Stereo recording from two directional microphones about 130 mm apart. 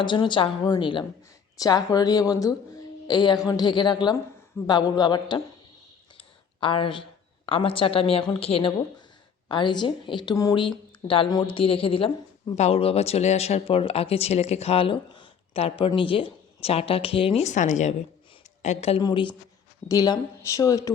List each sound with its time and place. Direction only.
0.0 s a woman's voice: 40° left (ahead or behind)
17.4 s speech: 65° left (ahead or behind)
19.0 s a woman's voice: 40° left (ahead or behind)